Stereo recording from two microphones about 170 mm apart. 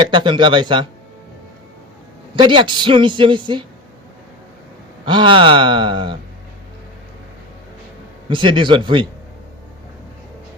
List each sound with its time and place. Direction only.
0.1 s a man's voice: 30° right (ahead or behind)
2.3 s a man's voice: 30° right (ahead or behind)
5.0 s a man's voice: 30° right (ahead or behind)
8.3 s a man's voice: 30° right (ahead or behind)